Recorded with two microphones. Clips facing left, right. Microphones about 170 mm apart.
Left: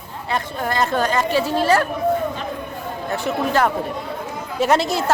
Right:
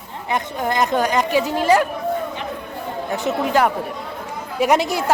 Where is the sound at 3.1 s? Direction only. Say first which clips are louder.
Right 1 dB; 15° right (ahead or behind).